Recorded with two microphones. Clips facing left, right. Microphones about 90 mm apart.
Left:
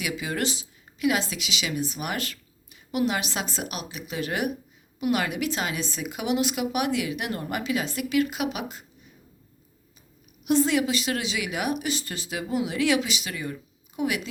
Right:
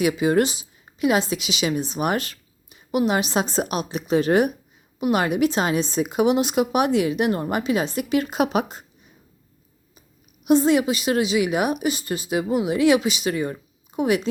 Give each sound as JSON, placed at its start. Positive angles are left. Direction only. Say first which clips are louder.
{"t": 0.0, "sound": "a woman's voice", "louder": "right 10 dB", "side_deg": -30}
{"t": 8.4, "sound": "speech", "louder": "right 8 dB", "side_deg": -40}
{"t": 10.4, "sound": "a woman's voice", "louder": "right 5 dB", "side_deg": -20}